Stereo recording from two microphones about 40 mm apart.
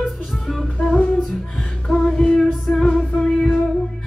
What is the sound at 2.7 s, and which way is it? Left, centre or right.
Music, centre.